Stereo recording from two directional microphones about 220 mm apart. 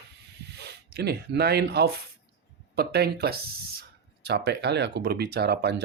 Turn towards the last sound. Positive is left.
turn(degrees=-50)  # may be behind; listen again after turning